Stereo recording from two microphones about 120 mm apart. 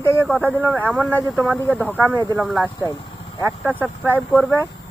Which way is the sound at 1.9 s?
15° right (ahead or behind).